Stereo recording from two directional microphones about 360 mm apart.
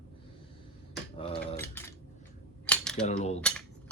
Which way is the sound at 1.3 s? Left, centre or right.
Centre.